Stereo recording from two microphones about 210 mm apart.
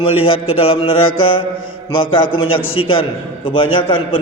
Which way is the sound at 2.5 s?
75° left (ahead or behind).